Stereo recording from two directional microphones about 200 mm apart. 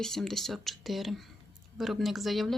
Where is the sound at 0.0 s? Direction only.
Centre (ahead or behind).